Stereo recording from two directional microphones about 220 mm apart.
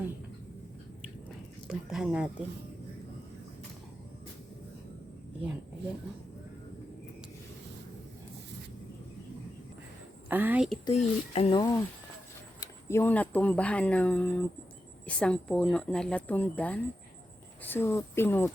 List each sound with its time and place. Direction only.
1.6 s speech: centre (ahead or behind)
10.2 s speech: 10° right (ahead or behind)
10.8 s speech: 25° left (ahead or behind); by 18.5 s 10° left (ahead or behind)